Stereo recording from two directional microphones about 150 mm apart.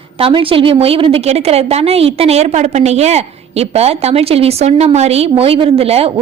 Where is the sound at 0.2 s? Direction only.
35° right (ahead or behind).